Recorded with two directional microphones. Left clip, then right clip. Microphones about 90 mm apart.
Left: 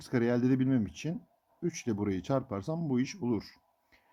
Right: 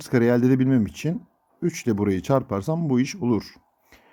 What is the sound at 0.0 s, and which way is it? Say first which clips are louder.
Speech: right 10 dB; 30° right (ahead or behind).